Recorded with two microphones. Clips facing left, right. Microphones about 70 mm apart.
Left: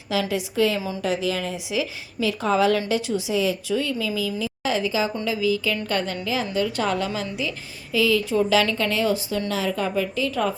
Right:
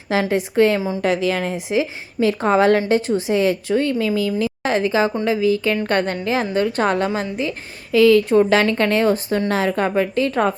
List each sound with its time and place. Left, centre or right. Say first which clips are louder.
0.1 s a woman's voice: right 5 dB; right
7.9 s a woman's voice: right 8 dB; right